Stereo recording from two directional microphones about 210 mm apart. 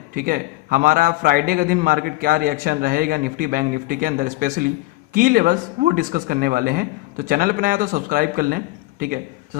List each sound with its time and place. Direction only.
0.1 s a man's voice: 45° right (ahead or behind)